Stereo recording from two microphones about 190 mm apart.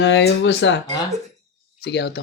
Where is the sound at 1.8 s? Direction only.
60° left (ahead or behind).